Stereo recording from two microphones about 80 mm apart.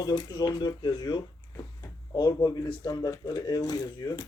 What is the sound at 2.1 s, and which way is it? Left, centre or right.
Speech, left.